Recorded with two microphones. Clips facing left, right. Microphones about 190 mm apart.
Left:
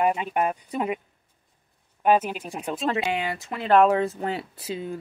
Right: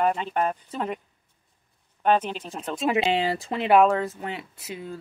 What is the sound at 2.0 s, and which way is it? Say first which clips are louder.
Speech: left 1 dB; 10° left (ahead or behind).